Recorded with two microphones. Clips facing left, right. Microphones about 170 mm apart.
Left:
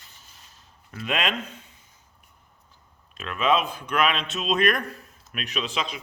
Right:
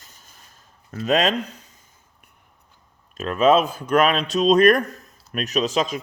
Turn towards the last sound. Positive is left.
turn(degrees=-45)  # may be behind; listen again after turning